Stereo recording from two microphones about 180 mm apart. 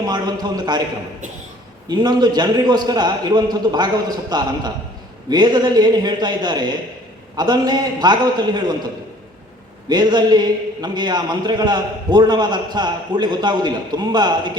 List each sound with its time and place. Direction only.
0.0 s a man's voice: 20° right (ahead or behind)
1.9 s a man's voice: 25° right (ahead or behind)
9.9 s a man's voice: 25° right (ahead or behind)